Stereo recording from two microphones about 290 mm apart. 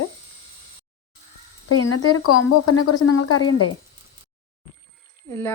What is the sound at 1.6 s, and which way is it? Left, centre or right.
Speech, left.